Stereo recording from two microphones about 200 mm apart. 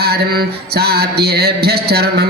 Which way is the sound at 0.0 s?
50° right (ahead or behind).